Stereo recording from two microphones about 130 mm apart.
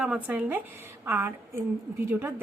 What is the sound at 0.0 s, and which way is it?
Speech, 10° right (ahead or behind).